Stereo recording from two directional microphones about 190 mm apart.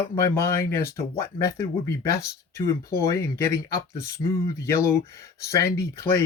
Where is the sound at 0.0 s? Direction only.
15° left (ahead or behind).